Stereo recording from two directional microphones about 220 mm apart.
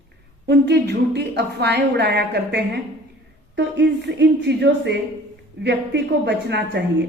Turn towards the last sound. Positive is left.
turn(degrees=-50)  # may be behind; listen again after turning